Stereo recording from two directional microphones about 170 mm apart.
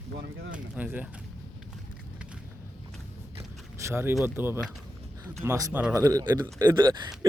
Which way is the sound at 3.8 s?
15° right (ahead or behind).